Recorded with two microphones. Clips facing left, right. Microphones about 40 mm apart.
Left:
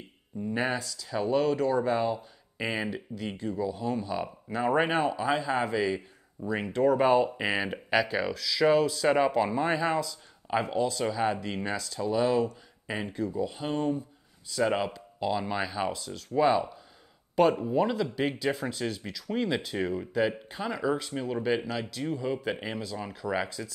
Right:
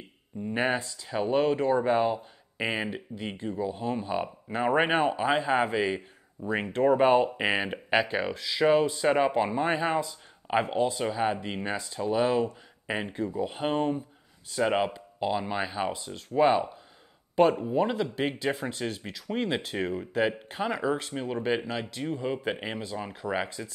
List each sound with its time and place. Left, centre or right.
0.6 s speech: right
17.4 s speech: centre
18.1 s speech: right
20.2 s speech: right
21.5 s speech: right